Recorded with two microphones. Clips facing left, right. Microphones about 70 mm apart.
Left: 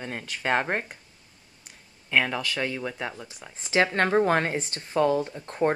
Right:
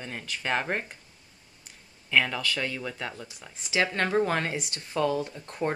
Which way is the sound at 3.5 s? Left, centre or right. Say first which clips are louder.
Left 4 dB; left.